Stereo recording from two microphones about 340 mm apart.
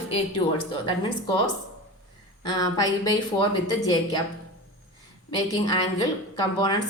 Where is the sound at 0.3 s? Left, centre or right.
Centre.